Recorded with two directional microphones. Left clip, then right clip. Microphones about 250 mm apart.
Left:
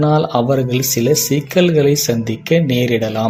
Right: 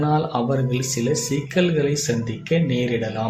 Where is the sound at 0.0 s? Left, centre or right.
Left.